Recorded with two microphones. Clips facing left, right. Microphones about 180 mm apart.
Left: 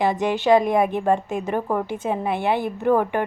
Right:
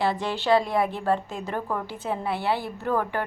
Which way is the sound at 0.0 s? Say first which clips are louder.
Left 5 dB; 15° left (ahead or behind).